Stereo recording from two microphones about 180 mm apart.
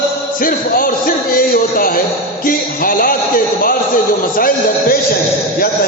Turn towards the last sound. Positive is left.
turn(degrees=55)  # may be behind; listen again after turning